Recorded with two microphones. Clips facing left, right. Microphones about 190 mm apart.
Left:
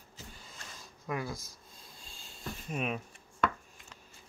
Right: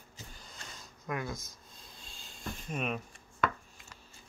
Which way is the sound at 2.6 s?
5° left (ahead or behind).